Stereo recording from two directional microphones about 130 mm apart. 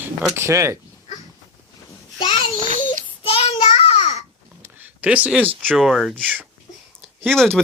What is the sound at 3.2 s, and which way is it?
Child singing, 45° left (ahead or behind).